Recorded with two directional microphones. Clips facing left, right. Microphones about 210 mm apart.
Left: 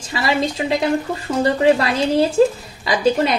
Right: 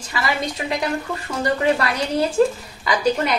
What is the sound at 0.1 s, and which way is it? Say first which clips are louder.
Speech: left 4 dB; 25° left (ahead or behind).